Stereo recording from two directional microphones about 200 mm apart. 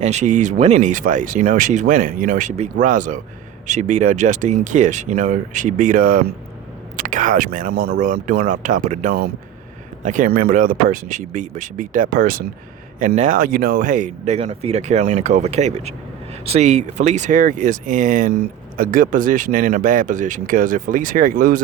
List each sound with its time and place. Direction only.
0.0 s speech: 35° right (ahead or behind)